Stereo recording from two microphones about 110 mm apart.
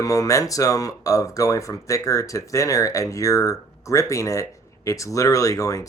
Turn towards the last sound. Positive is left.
turn(degrees=30)  # may be behind; listen again after turning